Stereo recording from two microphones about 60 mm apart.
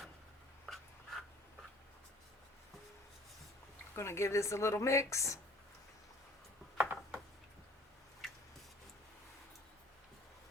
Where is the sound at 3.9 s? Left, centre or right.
Left.